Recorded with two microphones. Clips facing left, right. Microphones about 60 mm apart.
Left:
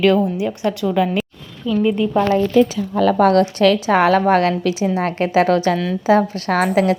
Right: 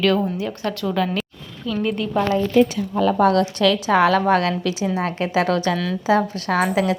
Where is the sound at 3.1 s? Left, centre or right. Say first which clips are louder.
Left 3 dB; left.